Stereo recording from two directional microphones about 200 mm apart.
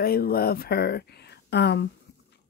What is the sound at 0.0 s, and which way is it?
A woman's voice, 50° left (ahead or behind).